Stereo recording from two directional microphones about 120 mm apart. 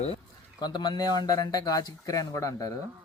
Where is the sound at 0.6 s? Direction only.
35° left (ahead or behind).